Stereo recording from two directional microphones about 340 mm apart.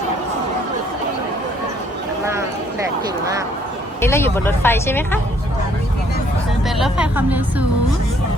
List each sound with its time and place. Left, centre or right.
4.0 s speech: centre
6.7 s speech: centre